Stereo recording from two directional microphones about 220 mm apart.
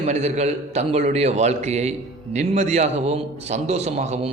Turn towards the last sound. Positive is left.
turn(degrees=-30)  # may be behind; listen again after turning